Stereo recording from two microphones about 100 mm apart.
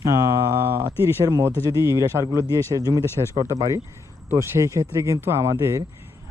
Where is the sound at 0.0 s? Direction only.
30° right (ahead or behind).